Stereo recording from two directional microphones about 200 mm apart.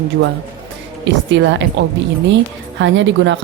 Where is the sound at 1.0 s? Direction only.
65° right (ahead or behind).